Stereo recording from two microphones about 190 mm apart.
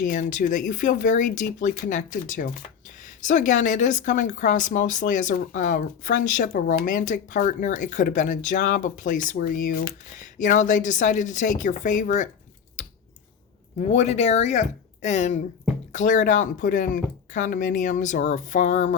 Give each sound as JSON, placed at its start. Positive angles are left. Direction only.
{"t": 0.0, "sound": "speech", "side_deg": 40}
{"t": 13.7, "sound": "speech", "side_deg": 35}